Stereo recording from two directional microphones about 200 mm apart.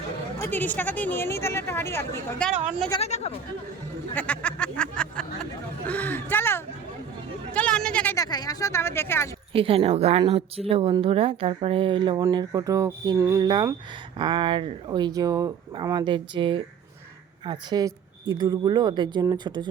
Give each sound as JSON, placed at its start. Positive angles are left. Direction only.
{"t": 0.4, "sound": "speech", "side_deg": 10}
{"t": 3.0, "sound": "speech", "side_deg": 30}
{"t": 4.1, "sound": "speech", "side_deg": 5}
{"t": 7.5, "sound": "hubbub", "side_deg": 5}
{"t": 8.1, "sound": "speech", "side_deg": 20}
{"t": 9.5, "sound": "speech", "side_deg": -30}